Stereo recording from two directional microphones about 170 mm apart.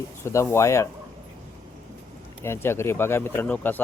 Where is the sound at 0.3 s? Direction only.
15° left (ahead or behind).